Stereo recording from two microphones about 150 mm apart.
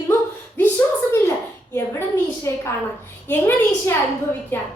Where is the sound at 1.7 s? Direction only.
15° left (ahead or behind).